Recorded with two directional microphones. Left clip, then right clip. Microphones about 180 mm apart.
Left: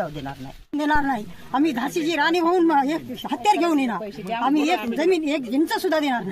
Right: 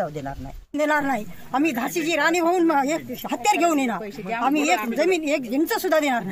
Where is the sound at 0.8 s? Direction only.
30° right (ahead or behind).